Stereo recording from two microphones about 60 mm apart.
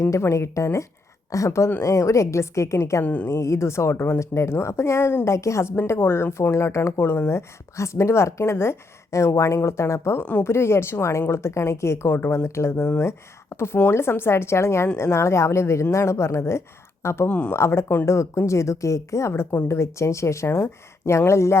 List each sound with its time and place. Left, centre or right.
0.0 s a woman's voice: left
3.0 s a woman's voice: left
3.2 s a woman's voice: left
6.5 s a woman's voice: left
7.0 s a woman's voice: left
10.2 s a woman's voice: left
10.4 s a woman's voice: left
17.2 s a woman's voice: left
17.5 s a woman's voice: left